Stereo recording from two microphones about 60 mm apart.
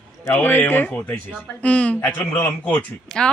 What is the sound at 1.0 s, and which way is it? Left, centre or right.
Speech, left.